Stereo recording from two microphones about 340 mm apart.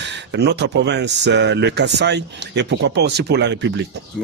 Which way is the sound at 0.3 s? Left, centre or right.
Right.